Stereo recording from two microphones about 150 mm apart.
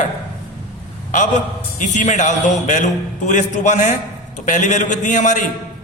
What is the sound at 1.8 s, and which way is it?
A man's voice, 55° left (ahead or behind).